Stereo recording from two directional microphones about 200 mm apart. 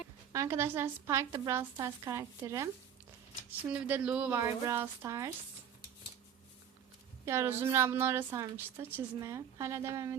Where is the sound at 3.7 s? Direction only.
5° right (ahead or behind).